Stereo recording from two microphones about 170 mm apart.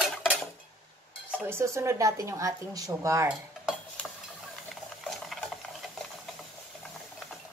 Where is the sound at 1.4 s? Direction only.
15° right (ahead or behind).